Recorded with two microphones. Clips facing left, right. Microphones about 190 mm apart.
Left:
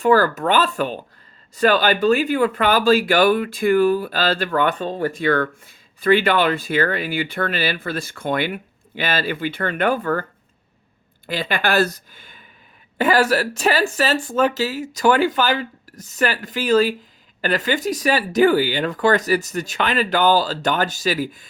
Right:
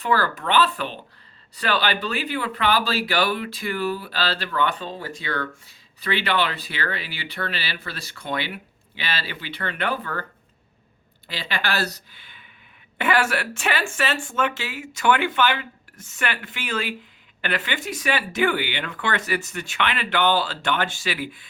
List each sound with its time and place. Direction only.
0.0 s speech: 45° left (ahead or behind)
11.3 s speech: 50° left (ahead or behind)